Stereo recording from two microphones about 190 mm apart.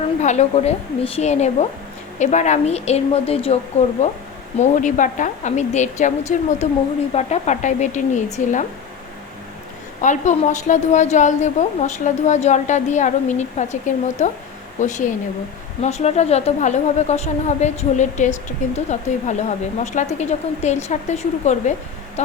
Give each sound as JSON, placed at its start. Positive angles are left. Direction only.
{"t": 0.2, "sound": "a woman's voice", "side_deg": 35}
{"t": 10.0, "sound": "a woman's voice", "side_deg": 40}